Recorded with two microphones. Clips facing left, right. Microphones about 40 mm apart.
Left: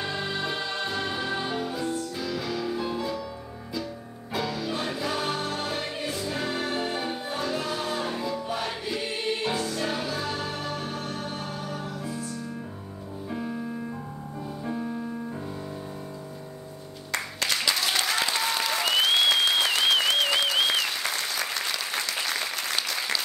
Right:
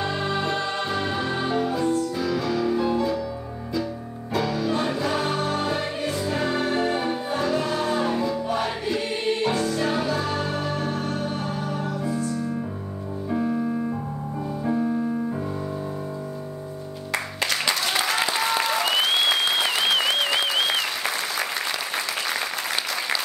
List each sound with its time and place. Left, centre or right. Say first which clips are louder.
0.0 s music: right 5 dB; centre
4.3 s music: right 5 dB; centre
13.3 s piano: right 8 dB; centre
17.6 s applause: right 2 dB; centre